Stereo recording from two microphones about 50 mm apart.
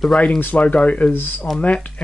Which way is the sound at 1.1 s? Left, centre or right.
Left.